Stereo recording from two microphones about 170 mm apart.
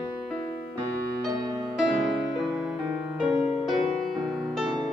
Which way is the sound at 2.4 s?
5° right (ahead or behind).